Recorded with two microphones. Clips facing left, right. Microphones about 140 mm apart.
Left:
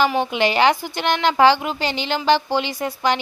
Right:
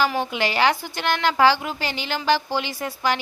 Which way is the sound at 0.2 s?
20° left (ahead or behind).